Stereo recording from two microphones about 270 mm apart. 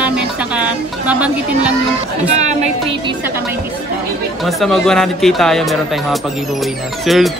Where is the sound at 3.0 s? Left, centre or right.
Centre.